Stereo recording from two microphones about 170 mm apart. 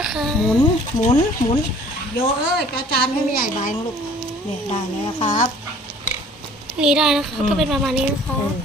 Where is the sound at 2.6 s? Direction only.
70° left (ahead or behind).